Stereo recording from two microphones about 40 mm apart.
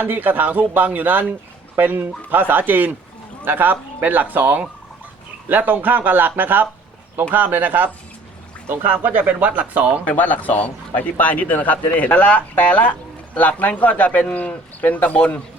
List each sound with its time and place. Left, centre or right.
0.0 s speech: right
8.6 s speech: right
8.9 s speech: right
10.1 s a man's voice: left